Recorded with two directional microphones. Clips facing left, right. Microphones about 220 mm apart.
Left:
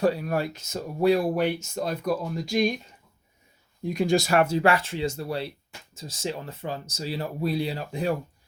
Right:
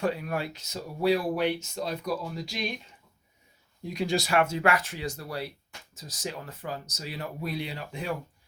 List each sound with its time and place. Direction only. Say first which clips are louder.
0.0 s speech: left 5 dB; 35° left (ahead or behind)
3.8 s speech: left 5 dB; 50° left (ahead or behind)